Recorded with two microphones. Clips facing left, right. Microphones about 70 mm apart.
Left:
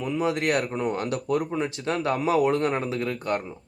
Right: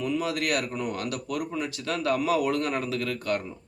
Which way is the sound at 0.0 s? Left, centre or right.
Left.